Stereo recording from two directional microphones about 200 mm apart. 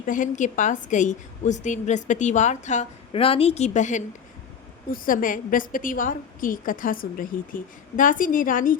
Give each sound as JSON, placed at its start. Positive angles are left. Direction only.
{"t": 0.0, "sound": "a woman's voice", "side_deg": 40}